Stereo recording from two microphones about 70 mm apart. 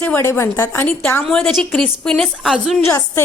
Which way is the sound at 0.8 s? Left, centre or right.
Left.